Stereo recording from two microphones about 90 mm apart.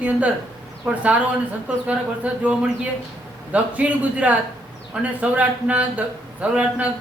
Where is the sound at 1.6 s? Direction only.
15° right (ahead or behind).